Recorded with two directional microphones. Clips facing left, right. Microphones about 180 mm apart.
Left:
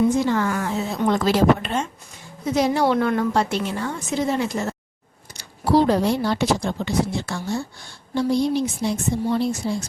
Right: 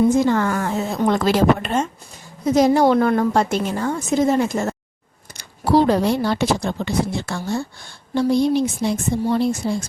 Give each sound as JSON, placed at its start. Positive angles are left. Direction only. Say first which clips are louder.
{"t": 0.2, "sound": "a woman's voice", "louder": "right 3 dB", "side_deg": -50}
{"t": 5.4, "sound": "speech", "louder": "right 2 dB", "side_deg": -60}